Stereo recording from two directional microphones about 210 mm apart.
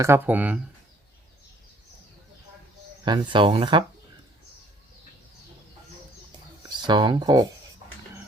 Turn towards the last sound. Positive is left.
turn(degrees=-20)  # may be behind; listen again after turning